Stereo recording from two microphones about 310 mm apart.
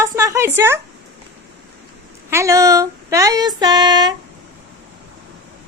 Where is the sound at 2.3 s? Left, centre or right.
Centre.